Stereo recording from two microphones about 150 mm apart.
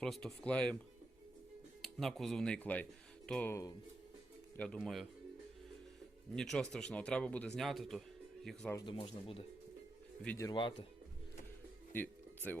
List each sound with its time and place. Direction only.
0.0 s speech: centre (ahead or behind)
1.8 s speech: centre (ahead or behind)
3.5 s speech: 25° left (ahead or behind)
4.5 s speech: 5° left (ahead or behind)
6.3 s speech: 5° left (ahead or behind)
8.9 s speech: 40° left (ahead or behind)
10.3 s speech: 25° left (ahead or behind)
11.9 s music: 10° left (ahead or behind)